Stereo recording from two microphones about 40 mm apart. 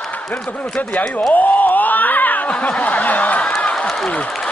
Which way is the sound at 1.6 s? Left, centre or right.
Left.